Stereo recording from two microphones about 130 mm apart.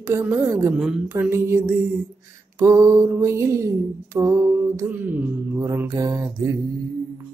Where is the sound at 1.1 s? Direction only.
15° right (ahead or behind).